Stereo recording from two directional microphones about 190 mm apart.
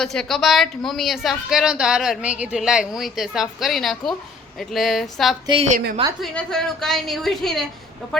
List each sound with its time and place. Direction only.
0.0 s a woman's voice: centre (ahead or behind)
5.5 s a woman's voice: 30° right (ahead or behind)
6.2 s a woman's voice: 5° left (ahead or behind)